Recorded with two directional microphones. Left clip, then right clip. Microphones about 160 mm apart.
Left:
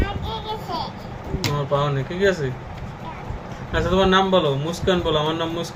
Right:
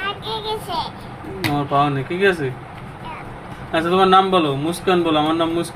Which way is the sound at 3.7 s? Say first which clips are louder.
Right 4 dB; 55° right (ahead or behind).